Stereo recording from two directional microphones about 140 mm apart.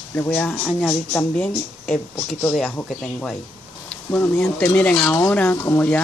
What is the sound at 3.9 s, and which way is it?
Speech, 15° left (ahead or behind).